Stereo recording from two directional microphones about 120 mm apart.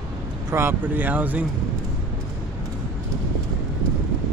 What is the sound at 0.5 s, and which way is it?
Speech, 20° right (ahead or behind).